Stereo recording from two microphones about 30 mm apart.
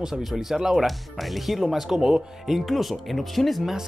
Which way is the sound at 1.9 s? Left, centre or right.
Centre.